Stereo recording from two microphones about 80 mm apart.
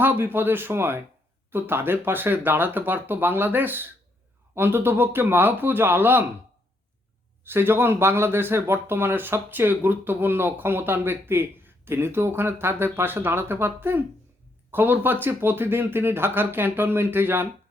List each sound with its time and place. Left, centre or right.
0.0 s speech: right
7.4 s speech: right